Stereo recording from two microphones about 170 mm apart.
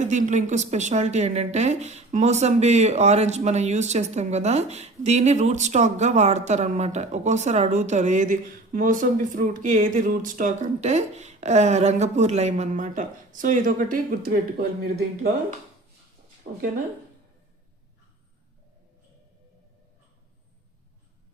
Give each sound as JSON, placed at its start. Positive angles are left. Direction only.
{"t": 0.0, "sound": "a woman's voice", "side_deg": -45}